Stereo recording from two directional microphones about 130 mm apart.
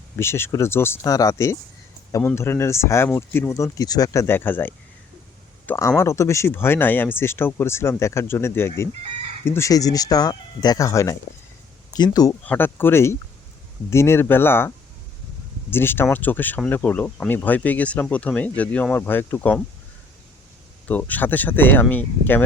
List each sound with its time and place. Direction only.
0.2 s speech: 20° left (ahead or behind)
12.5 s speech: 15° left (ahead or behind)
15.7 s speech: 15° left (ahead or behind)
20.8 s speech: 10° left (ahead or behind)